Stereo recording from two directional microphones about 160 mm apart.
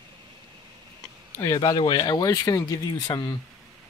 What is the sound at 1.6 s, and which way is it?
Speech, 25° left (ahead or behind).